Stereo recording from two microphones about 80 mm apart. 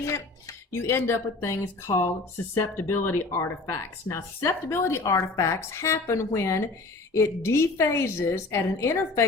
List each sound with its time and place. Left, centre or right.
0.0 s speech: left
3.3 s speech: left